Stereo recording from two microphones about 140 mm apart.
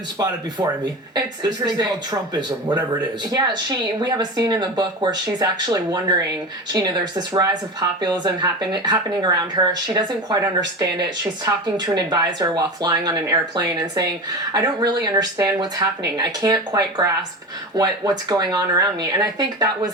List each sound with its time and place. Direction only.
1.1 s speech: 30° right (ahead or behind)